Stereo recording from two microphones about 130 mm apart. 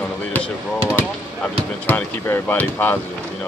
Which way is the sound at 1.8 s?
15° left (ahead or behind).